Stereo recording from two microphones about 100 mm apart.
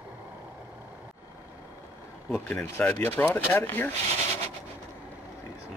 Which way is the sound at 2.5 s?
15° left (ahead or behind).